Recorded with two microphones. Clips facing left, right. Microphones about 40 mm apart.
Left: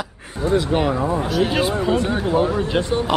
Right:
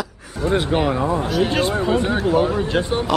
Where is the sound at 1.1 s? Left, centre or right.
Centre.